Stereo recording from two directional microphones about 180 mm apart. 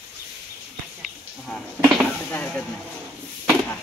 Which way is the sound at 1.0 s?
Centre (ahead or behind).